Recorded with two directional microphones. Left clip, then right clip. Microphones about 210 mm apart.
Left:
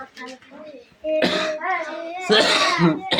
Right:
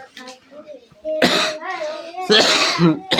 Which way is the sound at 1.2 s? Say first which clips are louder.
Right 6 dB; 40° right (ahead or behind).